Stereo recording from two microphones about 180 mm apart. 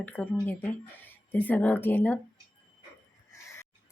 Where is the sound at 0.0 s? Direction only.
10° left (ahead or behind).